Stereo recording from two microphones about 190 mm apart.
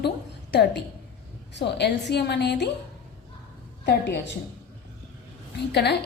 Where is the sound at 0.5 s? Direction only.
60° left (ahead or behind).